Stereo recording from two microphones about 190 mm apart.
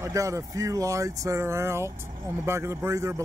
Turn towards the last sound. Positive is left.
turn(degrees=-15)  # may be behind; listen again after turning